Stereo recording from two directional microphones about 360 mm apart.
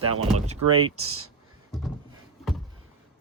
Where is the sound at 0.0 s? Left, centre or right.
Right.